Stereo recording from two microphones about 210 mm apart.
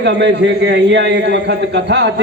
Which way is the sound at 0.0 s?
55° right (ahead or behind).